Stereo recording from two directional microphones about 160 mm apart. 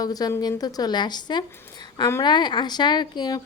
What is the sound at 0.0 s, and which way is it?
Speech, 25° left (ahead or behind).